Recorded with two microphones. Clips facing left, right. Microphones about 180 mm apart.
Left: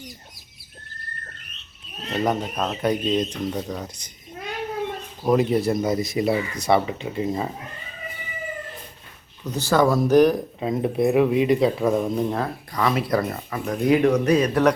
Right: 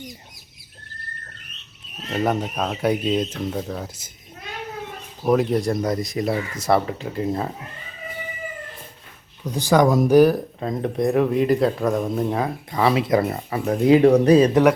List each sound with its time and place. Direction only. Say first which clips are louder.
2.1 s speech: right 1 dB; 10° right (ahead or behind)
5.2 s speech: even; centre (ahead or behind)
9.4 s speech: right 2 dB; 10° right (ahead or behind)
10.6 s speech: left 5 dB; 5° left (ahead or behind)
12.7 s speech: right 3 dB; 25° right (ahead or behind)